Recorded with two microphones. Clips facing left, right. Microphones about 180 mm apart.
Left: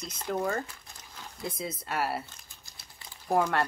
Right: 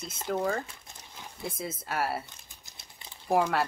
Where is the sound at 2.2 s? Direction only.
20° right (ahead or behind).